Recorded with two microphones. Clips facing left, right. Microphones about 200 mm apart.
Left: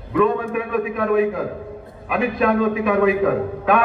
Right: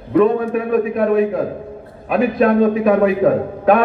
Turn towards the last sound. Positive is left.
turn(degrees=-35)  # may be behind; listen again after turning